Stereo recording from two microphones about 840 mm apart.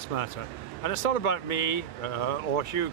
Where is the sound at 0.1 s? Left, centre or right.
Left.